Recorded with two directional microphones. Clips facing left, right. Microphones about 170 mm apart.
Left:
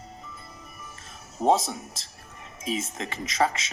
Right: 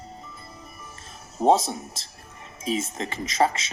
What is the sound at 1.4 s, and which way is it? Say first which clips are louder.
Speech: right 3 dB; 35° right (ahead or behind).